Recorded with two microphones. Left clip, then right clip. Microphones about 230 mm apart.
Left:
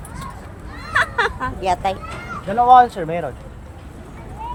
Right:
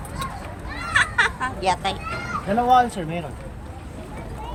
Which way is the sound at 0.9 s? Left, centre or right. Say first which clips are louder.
Left 1 dB; centre.